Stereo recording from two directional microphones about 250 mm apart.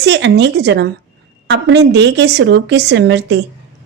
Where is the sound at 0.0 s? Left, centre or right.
Right.